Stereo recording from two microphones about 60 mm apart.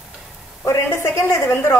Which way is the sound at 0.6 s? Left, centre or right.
Left.